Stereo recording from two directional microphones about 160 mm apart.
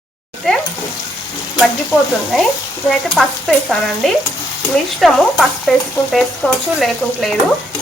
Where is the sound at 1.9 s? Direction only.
20° left (ahead or behind).